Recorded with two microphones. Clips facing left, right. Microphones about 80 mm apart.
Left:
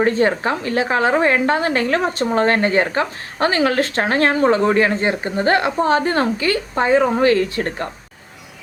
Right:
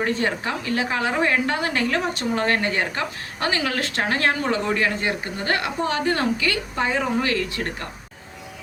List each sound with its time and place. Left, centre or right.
0.0 s a woman's voice: left